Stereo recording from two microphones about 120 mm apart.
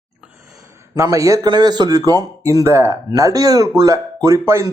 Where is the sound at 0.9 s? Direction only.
25° right (ahead or behind).